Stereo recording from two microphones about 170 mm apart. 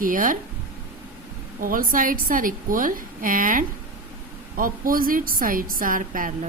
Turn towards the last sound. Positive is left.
turn(degrees=-55)  # may be behind; listen again after turning